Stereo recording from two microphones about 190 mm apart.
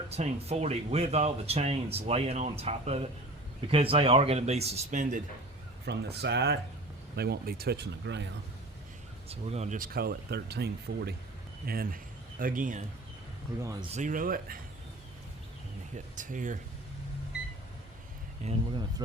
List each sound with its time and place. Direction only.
0.1 s speech: 35° right (ahead or behind)
5.8 s speech: 60° right (ahead or behind)
9.3 s speech: 35° right (ahead or behind)
13.9 s speech: 45° right (ahead or behind)
16.1 s speech: 45° right (ahead or behind)
18.4 s speech: 25° right (ahead or behind)